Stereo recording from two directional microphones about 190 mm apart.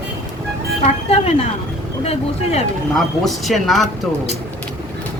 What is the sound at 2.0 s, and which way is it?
Speech, 35° left (ahead or behind).